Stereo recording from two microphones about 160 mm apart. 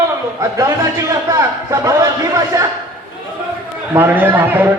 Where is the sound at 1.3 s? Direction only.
20° right (ahead or behind).